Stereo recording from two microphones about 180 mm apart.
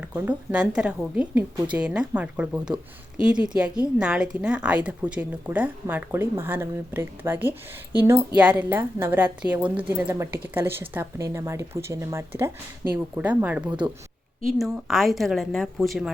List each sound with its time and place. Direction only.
0.0 s a woman's voice: 10° right (ahead or behind)
13.7 s speech: 25° right (ahead or behind)
14.4 s speech: centre (ahead or behind)